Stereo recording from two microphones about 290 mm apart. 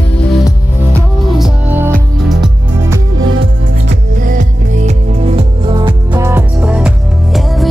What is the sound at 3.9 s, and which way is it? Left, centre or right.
Music, right.